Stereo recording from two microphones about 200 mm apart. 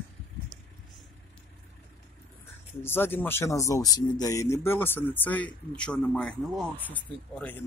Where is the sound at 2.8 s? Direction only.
10° left (ahead or behind).